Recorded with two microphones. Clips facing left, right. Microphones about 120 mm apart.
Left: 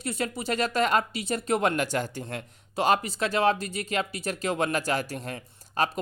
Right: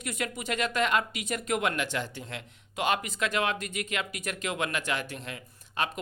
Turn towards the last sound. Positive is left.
turn(degrees=35)  # may be behind; listen again after turning